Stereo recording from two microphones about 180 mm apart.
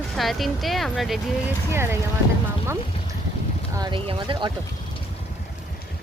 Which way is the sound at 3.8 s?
25° right (ahead or behind).